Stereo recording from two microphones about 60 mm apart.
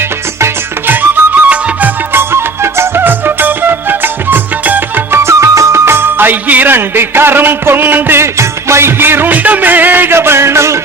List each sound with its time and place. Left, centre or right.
1.5 s music: right
2.1 s music: right
5.1 s music: right
8.2 s music: right
9.0 s music: right